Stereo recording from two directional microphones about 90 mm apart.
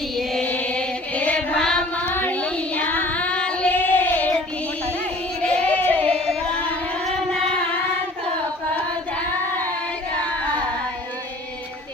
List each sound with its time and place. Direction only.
0.4 s chant: 15° left (ahead or behind)
2.0 s child singing: 20° left (ahead or behind)
5.4 s child singing: 15° left (ahead or behind)
6.1 s carnatic music: 10° left (ahead or behind)
7.3 s singing: 10° left (ahead or behind)
10.2 s singing: 15° left (ahead or behind)